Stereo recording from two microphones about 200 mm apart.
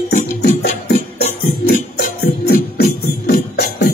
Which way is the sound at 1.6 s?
50° left (ahead or behind).